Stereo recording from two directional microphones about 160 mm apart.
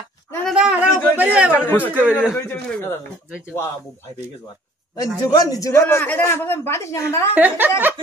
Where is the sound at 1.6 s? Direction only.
15° left (ahead or behind).